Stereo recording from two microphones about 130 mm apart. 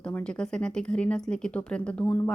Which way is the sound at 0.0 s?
10° left (ahead or behind).